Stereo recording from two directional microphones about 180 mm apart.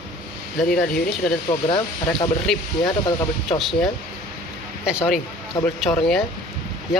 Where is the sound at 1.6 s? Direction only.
30° left (ahead or behind).